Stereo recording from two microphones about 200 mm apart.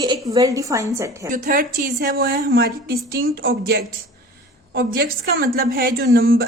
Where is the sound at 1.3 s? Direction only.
40° right (ahead or behind).